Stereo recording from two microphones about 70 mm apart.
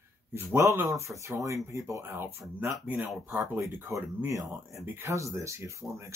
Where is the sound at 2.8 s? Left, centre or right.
Right.